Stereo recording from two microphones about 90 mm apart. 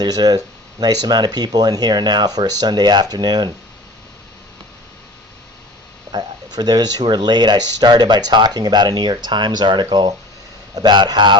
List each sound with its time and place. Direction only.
0.0 s speech: 50° right (ahead or behind)
6.1 s a man's voice: 50° right (ahead or behind)